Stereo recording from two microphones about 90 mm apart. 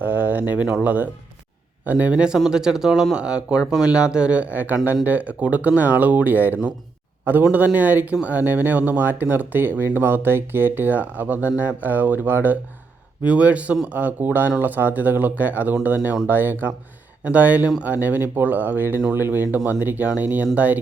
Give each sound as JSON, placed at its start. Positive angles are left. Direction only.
{"t": 0.0, "sound": "speech", "side_deg": -20}